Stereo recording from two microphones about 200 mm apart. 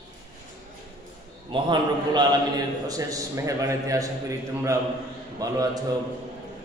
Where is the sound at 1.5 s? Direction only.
20° right (ahead or behind).